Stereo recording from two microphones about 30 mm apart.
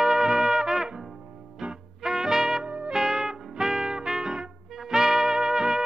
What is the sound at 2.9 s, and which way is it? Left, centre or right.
Music, centre.